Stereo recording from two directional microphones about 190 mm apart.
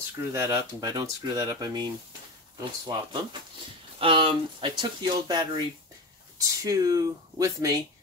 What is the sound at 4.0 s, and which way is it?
Speech, 25° right (ahead or behind).